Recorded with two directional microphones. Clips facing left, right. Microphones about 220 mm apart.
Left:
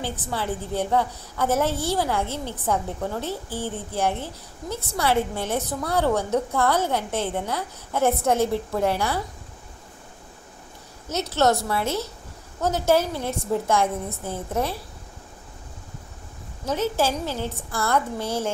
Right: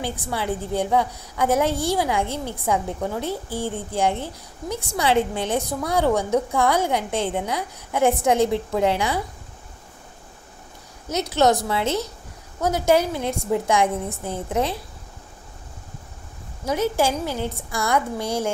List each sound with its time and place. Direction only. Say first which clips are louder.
0.0 s a woman's voice: right 2 dB; 10° right (ahead or behind)
11.1 s a woman's voice: right 2 dB; 15° right (ahead or behind)
16.6 s a woman's voice: right 2 dB; 10° right (ahead or behind)